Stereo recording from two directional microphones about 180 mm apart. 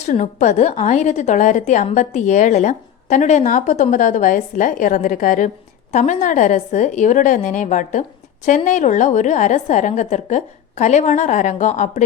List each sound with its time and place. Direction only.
0.0 s a woman's voice: 40° left (ahead or behind)